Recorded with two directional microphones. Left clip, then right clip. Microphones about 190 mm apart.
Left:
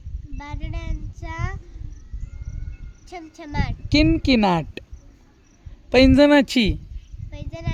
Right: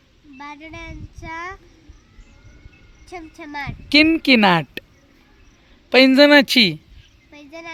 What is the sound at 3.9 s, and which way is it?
Speech, 5° right (ahead or behind).